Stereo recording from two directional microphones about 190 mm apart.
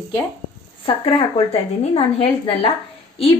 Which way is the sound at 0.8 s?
30° left (ahead or behind).